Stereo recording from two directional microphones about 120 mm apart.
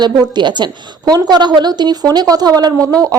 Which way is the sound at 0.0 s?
40° right (ahead or behind).